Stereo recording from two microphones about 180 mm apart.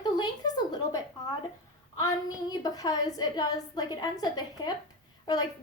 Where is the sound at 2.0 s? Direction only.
20° left (ahead or behind).